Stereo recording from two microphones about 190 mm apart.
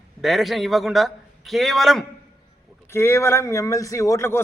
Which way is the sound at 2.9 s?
15° left (ahead or behind).